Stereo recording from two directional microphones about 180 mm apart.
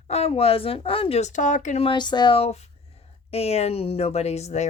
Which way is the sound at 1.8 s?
25° left (ahead or behind).